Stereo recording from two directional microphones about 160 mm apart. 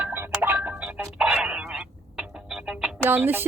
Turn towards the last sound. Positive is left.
turn(degrees=-15)  # may be behind; listen again after turning